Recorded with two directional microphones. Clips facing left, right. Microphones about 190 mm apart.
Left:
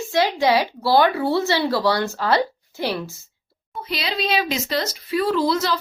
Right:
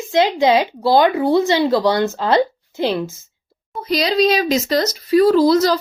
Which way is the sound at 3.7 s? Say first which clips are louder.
Right 9 dB; 40° right (ahead or behind).